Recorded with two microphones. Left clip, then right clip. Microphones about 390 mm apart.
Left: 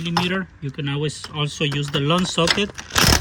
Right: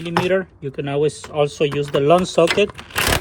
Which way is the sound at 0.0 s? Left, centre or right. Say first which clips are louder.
Right 4 dB; centre.